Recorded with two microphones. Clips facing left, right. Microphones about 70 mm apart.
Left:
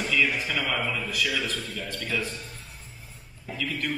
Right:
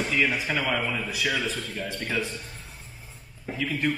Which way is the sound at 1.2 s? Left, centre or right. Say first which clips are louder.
Right 2 dB; right.